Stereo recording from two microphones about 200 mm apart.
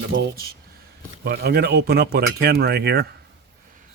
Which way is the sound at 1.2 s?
50° right (ahead or behind).